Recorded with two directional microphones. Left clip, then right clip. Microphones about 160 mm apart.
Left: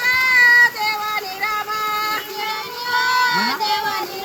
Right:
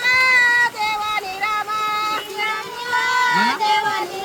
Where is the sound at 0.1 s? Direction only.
45° right (ahead or behind).